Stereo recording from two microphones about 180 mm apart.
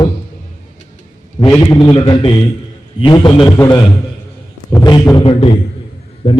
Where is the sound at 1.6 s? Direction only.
25° left (ahead or behind).